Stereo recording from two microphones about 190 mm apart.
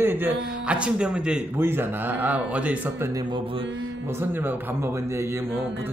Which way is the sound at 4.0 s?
10° right (ahead or behind).